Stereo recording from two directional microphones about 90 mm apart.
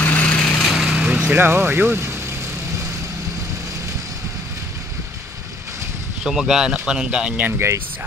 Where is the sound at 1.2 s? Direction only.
25° right (ahead or behind).